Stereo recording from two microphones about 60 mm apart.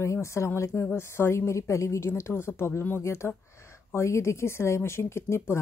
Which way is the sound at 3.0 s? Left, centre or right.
Left.